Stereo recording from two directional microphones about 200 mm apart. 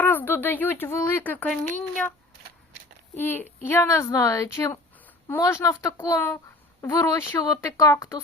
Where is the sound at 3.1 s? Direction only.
10° left (ahead or behind).